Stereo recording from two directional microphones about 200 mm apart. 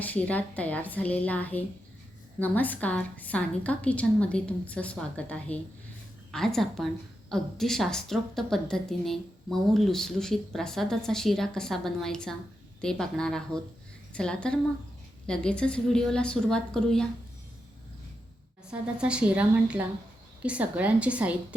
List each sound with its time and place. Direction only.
0.0 s a woman's voice: 5° left (ahead or behind)
18.7 s a woman's voice: 5° right (ahead or behind)